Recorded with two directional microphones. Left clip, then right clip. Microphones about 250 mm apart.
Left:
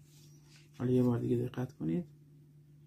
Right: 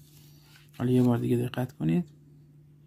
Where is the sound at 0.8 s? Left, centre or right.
Right.